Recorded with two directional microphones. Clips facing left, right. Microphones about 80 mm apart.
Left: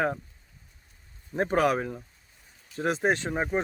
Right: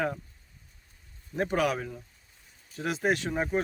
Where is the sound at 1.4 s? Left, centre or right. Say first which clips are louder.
Left 3 dB; left.